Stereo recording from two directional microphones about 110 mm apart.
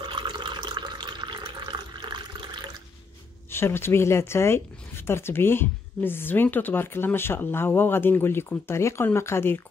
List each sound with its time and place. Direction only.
0.0 s water: 45° right (ahead or behind)
3.4 s speech: 20° left (ahead or behind)